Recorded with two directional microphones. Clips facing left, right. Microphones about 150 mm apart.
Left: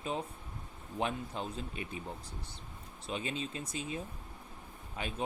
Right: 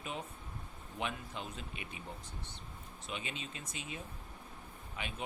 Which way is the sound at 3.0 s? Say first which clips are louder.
Left 6 dB; 35° left (ahead or behind).